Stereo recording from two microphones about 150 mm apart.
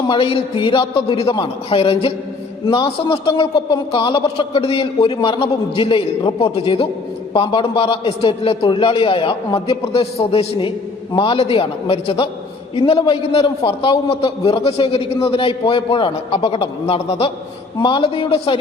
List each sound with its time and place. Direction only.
0.1 s a man's voice: 40° left (ahead or behind)